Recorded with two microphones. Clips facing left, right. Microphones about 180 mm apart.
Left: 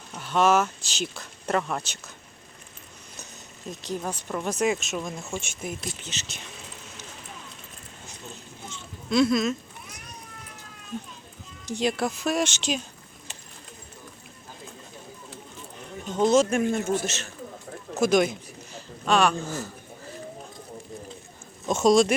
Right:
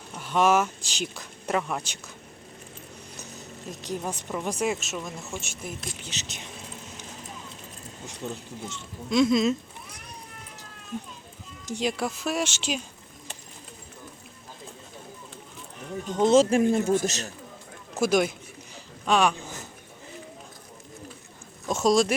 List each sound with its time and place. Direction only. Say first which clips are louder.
0.1 s speech: left 1 dB; 10° right (ahead or behind)
3.7 s speech: left 1 dB; 15° right (ahead or behind)
6.0 s speech: right 1 dB; 15° right (ahead or behind)
8.2 s speech: right 9 dB; 65° right (ahead or behind)
9.0 s speech: even; 15° right (ahead or behind)
9.4 s a sound: right 3 dB; 25° right (ahead or behind)
11.7 s speech: left 2 dB; 10° right (ahead or behind)
16.1 s speech: right 1 dB; 25° right (ahead or behind)
16.9 s speech: right 3 dB; 40° right (ahead or behind)
18.0 s speech: left 2 dB; 10° right (ahead or behind)
21.7 s speech: left 3 dB; centre (ahead or behind)